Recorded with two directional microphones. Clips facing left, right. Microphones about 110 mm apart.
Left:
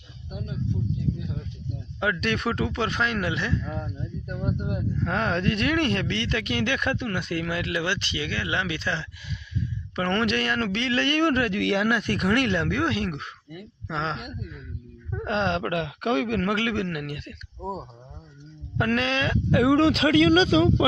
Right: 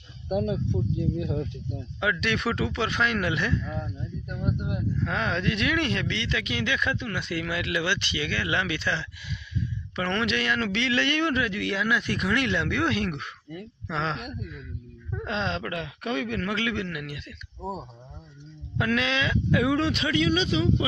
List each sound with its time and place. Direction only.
0.3 s speech: 65° right (ahead or behind)
2.0 s speech: 40° left (ahead or behind)
9.9 s speech: 45° left (ahead or behind)
13.6 s speech: 15° left (ahead or behind)
14.0 s speech: 25° left (ahead or behind)
15.3 s a man's voice: 55° left (ahead or behind)
18.8 s speech: 45° left (ahead or behind)
19.8 s speech: 90° left